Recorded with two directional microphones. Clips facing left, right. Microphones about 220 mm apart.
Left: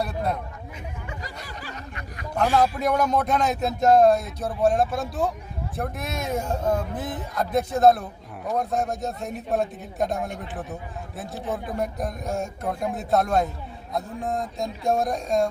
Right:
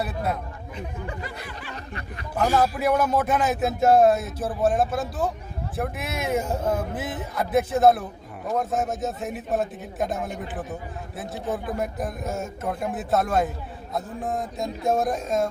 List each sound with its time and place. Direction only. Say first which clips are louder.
0.0 s speech: left 1 dB; 5° right (ahead or behind)
1.2 s a sound: right 2 dB; 40° left (ahead or behind)
1.7 s speech: right 2 dB; 30° right (ahead or behind)
2.3 s speech: even; 5° right (ahead or behind)